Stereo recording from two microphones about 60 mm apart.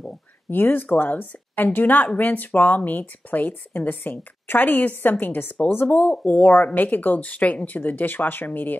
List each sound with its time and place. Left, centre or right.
0.5 s speech: left